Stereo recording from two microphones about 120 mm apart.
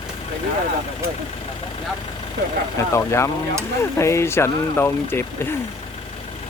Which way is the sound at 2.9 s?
25° left (ahead or behind).